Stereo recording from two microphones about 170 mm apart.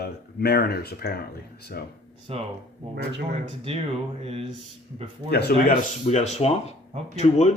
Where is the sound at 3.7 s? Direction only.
35° right (ahead or behind).